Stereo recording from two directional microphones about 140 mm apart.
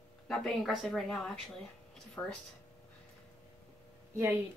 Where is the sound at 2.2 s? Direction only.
15° left (ahead or behind).